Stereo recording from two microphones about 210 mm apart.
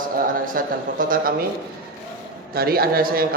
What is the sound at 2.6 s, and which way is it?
Speech, 45° right (ahead or behind).